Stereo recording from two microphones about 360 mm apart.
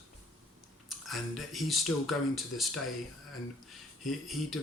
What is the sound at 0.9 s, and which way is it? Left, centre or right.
Speech, centre.